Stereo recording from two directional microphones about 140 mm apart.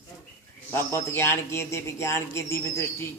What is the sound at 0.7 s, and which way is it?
A man's voice, 20° left (ahead or behind).